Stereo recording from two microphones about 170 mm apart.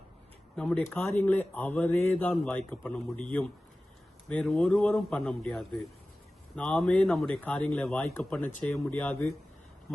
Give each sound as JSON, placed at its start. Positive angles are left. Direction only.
{"t": 0.5, "sound": "a man's voice", "side_deg": 5}